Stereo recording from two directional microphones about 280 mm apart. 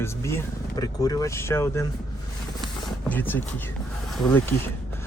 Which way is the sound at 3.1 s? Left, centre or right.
Centre.